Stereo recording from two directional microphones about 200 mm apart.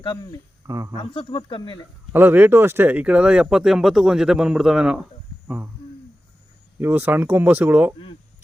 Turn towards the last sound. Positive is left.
turn(degrees=-10)  # may be behind; listen again after turning